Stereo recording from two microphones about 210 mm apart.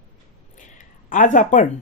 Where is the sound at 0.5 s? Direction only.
40° left (ahead or behind).